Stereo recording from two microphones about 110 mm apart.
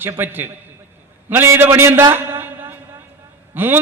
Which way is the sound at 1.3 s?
20° right (ahead or behind).